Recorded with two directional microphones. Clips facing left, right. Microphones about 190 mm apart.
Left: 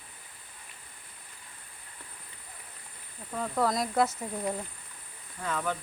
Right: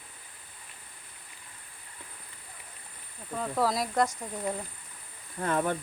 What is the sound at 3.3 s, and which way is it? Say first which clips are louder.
Speech: even; centre (ahead or behind).